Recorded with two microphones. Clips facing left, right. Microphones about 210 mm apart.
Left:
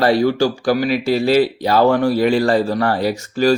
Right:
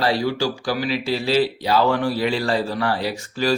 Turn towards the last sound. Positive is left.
turn(degrees=45)  # may be behind; listen again after turning